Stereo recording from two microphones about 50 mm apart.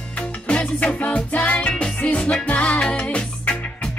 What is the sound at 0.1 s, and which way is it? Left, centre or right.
Music, left.